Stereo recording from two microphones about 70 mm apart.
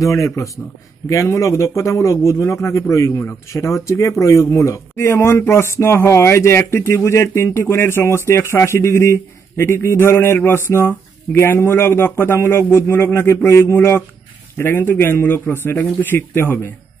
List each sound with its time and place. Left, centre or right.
0.0 s a man's voice: left
3.2 s speech: left
3.5 s a man's voice: left